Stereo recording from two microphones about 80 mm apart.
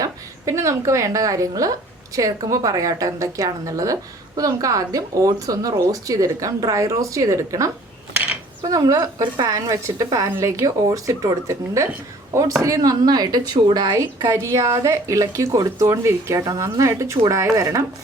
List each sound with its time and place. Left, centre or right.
0.0 s a woman's voice: right
8.1 s mechanisms: right
8.6 s a woman's voice: right
13.9 s a woman's voice: right